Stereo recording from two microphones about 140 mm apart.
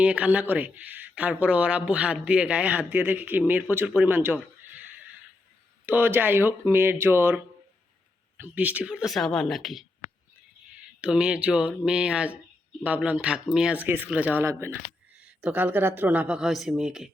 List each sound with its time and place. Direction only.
0.0 s speech: 10° right (ahead or behind)
5.8 s speech: 15° right (ahead or behind)
11.0 s speech: 5° right (ahead or behind)